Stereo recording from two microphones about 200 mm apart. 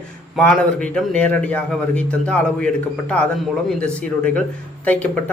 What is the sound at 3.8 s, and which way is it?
A man's voice, 5° left (ahead or behind).